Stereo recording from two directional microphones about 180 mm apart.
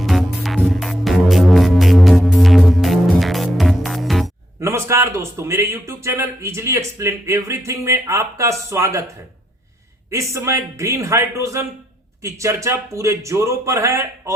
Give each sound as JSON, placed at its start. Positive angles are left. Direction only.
{"t": 0.0, "sound": "music", "side_deg": 0}
{"t": 4.6, "sound": "a man's voice", "side_deg": -15}
{"t": 10.1, "sound": "a man's voice", "side_deg": -15}